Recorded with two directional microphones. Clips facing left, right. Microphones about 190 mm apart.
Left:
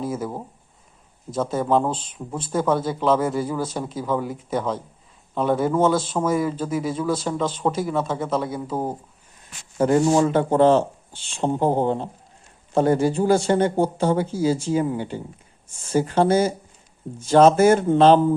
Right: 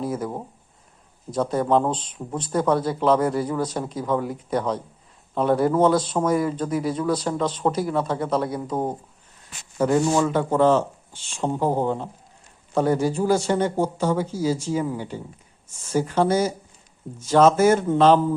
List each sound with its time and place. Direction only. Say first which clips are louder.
0.2 s speech: even; centre (ahead or behind)
2.0 s speech: even; 25° right (ahead or behind)
2.5 s speech: even; 5° left (ahead or behind)
9.7 s speech: left 2 dB; 25° left (ahead or behind)